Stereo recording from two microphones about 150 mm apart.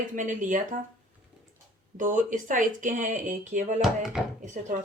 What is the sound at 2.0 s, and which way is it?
Speech, 55° right (ahead or behind).